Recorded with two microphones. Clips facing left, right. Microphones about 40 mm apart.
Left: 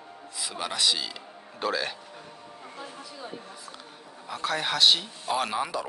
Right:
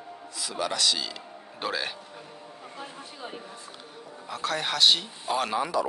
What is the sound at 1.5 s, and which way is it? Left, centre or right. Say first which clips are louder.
Speech: left 2 dB; centre.